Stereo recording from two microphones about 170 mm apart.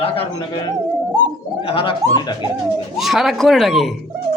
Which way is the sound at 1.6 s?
30° left (ahead or behind).